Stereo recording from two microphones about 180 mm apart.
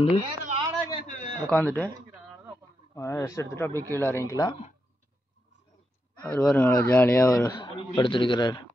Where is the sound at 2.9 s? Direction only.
15° left (ahead or behind).